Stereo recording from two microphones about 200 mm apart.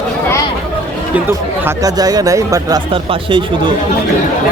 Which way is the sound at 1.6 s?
20° right (ahead or behind).